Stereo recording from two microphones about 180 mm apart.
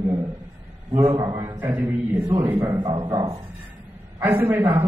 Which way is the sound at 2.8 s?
25° right (ahead or behind).